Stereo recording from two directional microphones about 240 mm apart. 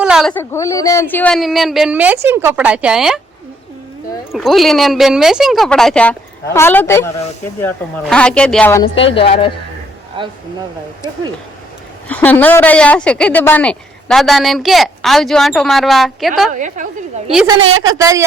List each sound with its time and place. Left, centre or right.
0.0 s a woman's voice: centre
4.3 s a woman's voice: centre
8.1 s a woman's voice: centre
8.8 s speech: left
10.2 s speech: centre
12.0 s a woman's voice: centre
16.5 s a woman's voice: right
17.6 s a woman's voice: right
17.8 s speech: centre